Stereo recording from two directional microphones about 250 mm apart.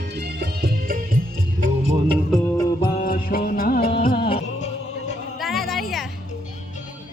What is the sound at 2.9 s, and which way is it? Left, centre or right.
Music, left.